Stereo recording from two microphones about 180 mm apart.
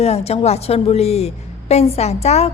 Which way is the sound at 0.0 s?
35° left (ahead or behind).